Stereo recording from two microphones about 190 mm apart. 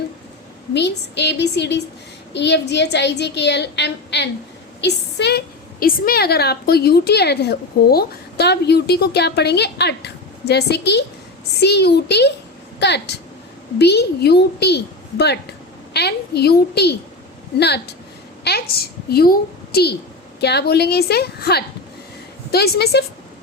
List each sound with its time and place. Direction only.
0.7 s a woman's voice: 65° left (ahead or behind)
15.9 s a woman's voice: 60° left (ahead or behind)